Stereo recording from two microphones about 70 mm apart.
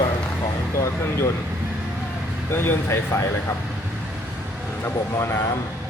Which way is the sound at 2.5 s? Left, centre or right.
Left.